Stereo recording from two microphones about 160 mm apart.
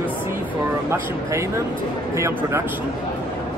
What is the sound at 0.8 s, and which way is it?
Speech, 15° right (ahead or behind).